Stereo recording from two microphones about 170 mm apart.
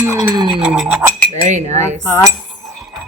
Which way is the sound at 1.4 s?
40° right (ahead or behind).